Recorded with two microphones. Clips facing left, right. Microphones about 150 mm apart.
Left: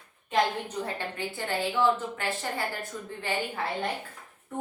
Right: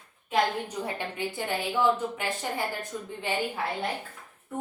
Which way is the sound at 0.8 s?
15° right (ahead or behind).